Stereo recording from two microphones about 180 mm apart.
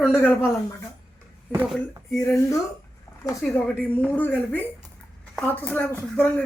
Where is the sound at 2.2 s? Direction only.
15° left (ahead or behind).